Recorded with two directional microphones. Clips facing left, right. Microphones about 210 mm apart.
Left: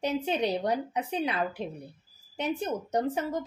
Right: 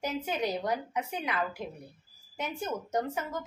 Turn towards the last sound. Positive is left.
turn(degrees=35)  # may be behind; listen again after turning